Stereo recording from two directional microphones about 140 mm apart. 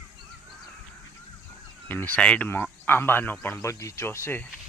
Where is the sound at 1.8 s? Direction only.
15° left (ahead or behind).